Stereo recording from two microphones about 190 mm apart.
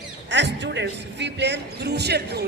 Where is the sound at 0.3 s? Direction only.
70° right (ahead or behind).